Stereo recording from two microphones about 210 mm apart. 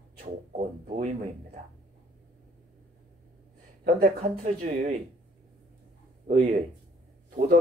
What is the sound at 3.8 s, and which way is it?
Speech, 40° right (ahead or behind).